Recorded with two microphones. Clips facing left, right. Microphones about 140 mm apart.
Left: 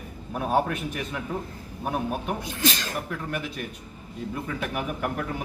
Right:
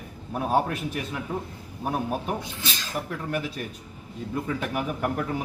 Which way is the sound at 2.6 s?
60° left (ahead or behind).